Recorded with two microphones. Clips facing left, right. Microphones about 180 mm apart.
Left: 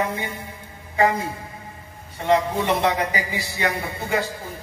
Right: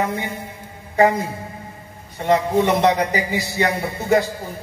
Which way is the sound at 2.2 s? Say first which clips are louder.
Right 3 dB; 45° right (ahead or behind).